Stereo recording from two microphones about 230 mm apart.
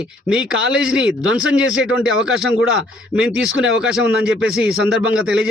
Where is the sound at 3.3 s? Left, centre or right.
Centre.